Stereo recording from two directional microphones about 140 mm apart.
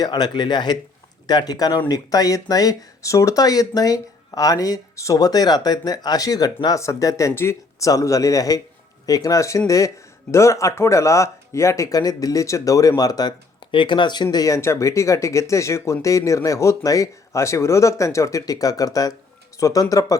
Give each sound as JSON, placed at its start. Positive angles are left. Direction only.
{"t": 0.0, "sound": "speech", "side_deg": 30}